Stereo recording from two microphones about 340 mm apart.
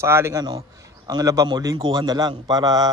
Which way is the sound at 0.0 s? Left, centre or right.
Centre.